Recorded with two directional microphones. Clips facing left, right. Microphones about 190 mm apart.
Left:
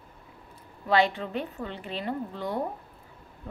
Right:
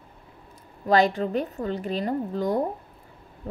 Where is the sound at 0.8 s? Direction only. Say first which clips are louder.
Right 4 dB; 40° right (ahead or behind).